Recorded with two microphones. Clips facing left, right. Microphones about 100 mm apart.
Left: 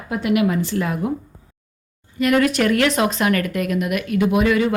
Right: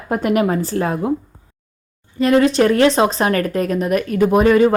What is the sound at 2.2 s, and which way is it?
Speech, 30° right (ahead or behind).